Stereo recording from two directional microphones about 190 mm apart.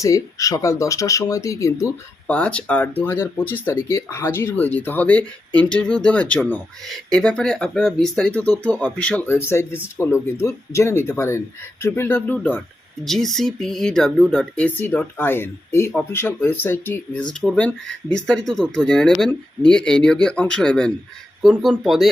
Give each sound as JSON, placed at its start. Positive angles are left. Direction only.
{"t": 0.0, "sound": "speech", "side_deg": 15}
{"t": 2.2, "sound": "speech", "side_deg": 5}